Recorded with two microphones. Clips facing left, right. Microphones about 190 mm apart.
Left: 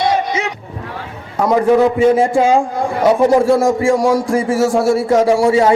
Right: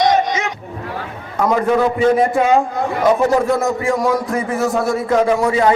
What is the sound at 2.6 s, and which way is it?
Speech, 10° left (ahead or behind).